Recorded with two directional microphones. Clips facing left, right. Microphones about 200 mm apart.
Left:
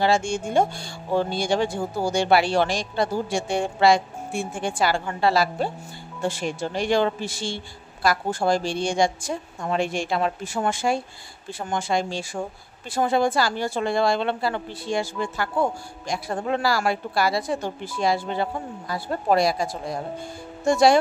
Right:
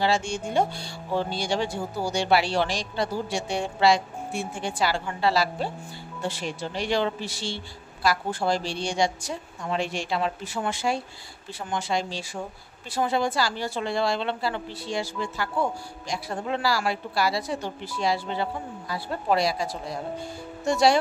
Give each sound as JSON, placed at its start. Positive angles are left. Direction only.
{"t": 0.0, "sound": "speech", "side_deg": 50}